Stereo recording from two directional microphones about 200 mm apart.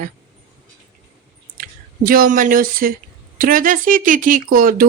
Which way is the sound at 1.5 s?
45° right (ahead or behind).